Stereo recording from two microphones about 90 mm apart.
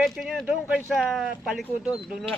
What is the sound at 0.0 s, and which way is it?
Speech, centre (ahead or behind).